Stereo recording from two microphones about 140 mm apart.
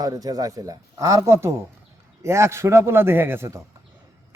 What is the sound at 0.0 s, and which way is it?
A man's voice, 25° right (ahead or behind).